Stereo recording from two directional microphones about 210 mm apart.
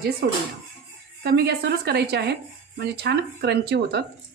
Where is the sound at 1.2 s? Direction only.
50° right (ahead or behind).